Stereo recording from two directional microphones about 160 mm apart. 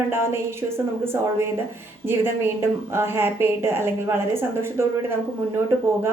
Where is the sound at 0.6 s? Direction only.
20° right (ahead or behind).